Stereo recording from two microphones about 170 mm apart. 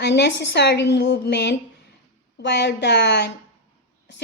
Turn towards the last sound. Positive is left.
turn(degrees=85)